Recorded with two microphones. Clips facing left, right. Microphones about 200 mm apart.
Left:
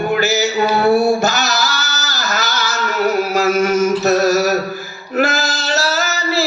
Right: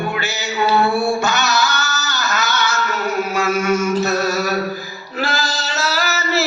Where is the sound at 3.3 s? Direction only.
40° left (ahead or behind).